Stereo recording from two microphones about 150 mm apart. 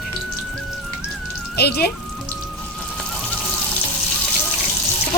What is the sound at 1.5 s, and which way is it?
Speech, 90° left.